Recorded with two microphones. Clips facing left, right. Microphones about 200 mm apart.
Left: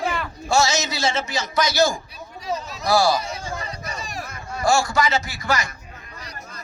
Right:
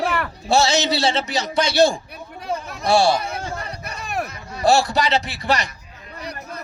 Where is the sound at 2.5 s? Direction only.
55° right (ahead or behind).